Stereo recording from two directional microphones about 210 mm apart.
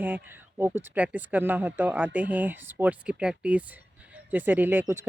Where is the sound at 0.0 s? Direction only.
10° right (ahead or behind).